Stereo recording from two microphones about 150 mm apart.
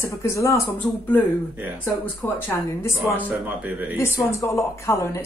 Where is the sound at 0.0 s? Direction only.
20° left (ahead or behind).